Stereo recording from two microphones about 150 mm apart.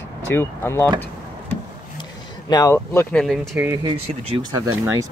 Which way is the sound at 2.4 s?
25° left (ahead or behind).